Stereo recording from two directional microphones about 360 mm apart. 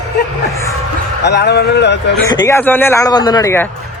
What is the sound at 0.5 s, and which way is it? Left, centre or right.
Music, centre.